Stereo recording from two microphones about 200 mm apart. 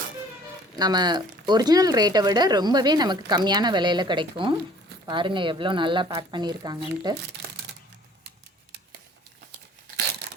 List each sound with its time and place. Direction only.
0.8 s speech: 20° right (ahead or behind)